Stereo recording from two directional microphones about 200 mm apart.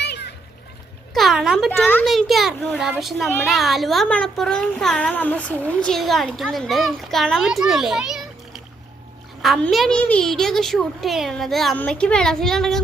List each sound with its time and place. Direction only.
0.0 s splash: 55° left (ahead or behind)
1.1 s a child's voice: centre (ahead or behind)
9.4 s a child's voice: centre (ahead or behind)